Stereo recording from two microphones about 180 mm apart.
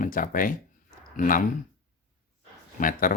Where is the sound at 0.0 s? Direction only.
50° left (ahead or behind).